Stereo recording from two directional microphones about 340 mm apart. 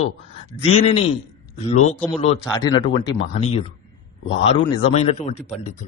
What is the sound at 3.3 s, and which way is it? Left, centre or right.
Mantra, centre.